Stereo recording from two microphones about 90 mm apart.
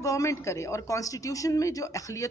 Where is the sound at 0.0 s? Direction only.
35° left (ahead or behind).